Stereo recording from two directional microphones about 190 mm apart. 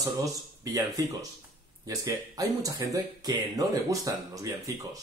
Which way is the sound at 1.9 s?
20° right (ahead or behind).